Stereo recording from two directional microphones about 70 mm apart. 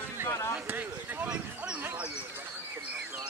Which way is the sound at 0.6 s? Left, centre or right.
Right.